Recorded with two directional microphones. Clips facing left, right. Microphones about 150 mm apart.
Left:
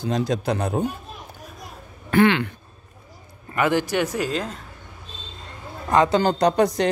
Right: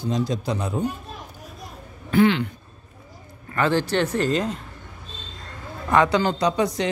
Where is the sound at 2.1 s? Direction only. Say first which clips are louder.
Left 1 dB; 65° left (ahead or behind).